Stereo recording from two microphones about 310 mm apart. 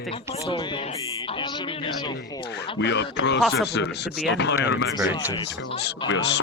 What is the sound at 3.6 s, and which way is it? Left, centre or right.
Speech, left.